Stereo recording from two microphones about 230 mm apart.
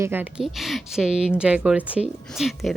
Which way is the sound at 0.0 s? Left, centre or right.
Centre.